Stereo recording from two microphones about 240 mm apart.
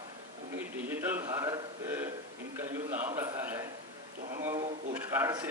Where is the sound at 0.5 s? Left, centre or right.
Centre.